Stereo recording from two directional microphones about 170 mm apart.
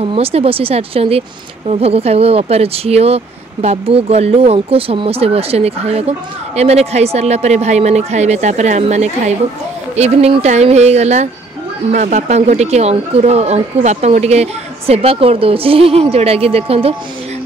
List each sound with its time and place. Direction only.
0.0 s speech: 35° right (ahead or behind)